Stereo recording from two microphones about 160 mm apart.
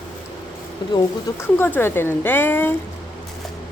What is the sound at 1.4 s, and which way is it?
Speech, 15° left (ahead or behind).